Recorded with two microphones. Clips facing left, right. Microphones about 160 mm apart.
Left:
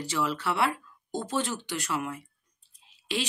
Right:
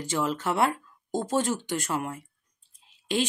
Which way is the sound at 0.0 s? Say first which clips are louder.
Right 2 dB; 50° right (ahead or behind).